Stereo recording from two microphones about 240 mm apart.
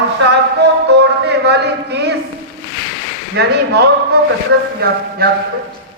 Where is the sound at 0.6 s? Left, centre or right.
Right.